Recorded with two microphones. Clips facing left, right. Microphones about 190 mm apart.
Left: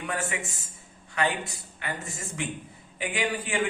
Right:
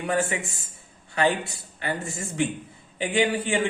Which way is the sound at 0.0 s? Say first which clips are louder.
Right 6 dB; 30° right (ahead or behind).